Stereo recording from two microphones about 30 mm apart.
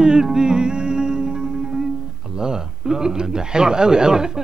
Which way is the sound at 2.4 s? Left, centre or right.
Right.